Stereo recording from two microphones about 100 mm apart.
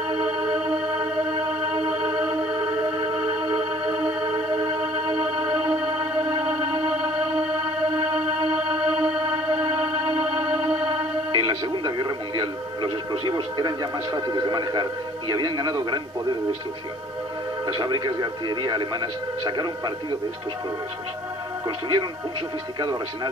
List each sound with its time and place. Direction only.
0.2 s music: 10° right (ahead or behind)
3.3 s music: 55° right (ahead or behind)
3.8 s music: 15° right (ahead or behind)
8.5 s music: 10° right (ahead or behind)
10.9 s music: 50° right (ahead or behind)
13.2 s a man's voice: 45° right (ahead or behind)
17.7 s a man's voice: 45° right (ahead or behind)
21.6 s a man's voice: 45° right (ahead or behind)